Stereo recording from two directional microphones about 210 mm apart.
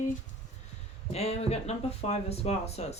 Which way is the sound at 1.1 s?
30° left (ahead or behind).